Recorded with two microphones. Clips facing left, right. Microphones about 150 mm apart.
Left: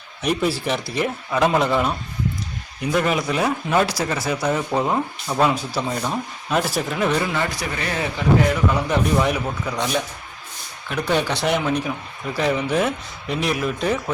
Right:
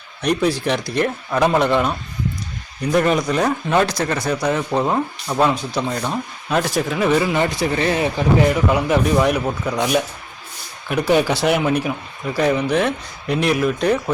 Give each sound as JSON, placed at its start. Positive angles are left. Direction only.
{"t": 0.2, "sound": "speech", "side_deg": 5}
{"t": 7.3, "sound": "speech", "side_deg": -25}
{"t": 8.7, "sound": "speech", "side_deg": -5}